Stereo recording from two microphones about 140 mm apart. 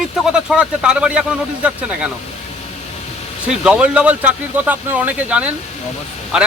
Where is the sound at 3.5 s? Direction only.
5° right (ahead or behind).